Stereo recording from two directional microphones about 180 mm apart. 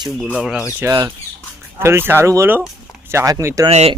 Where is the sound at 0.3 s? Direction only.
5° right (ahead or behind).